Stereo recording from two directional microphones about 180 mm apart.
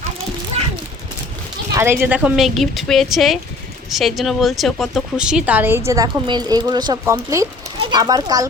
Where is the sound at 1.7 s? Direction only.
15° right (ahead or behind).